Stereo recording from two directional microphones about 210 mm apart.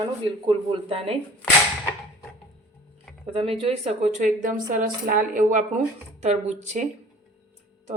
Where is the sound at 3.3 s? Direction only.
25° right (ahead or behind).